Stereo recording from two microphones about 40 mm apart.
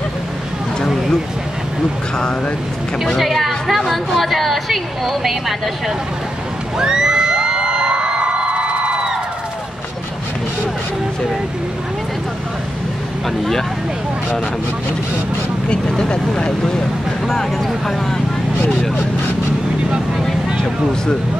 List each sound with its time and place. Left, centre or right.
3.2 s a woman's voice: centre
6.8 s music: centre
15.7 s speech: left
17.3 s speech: centre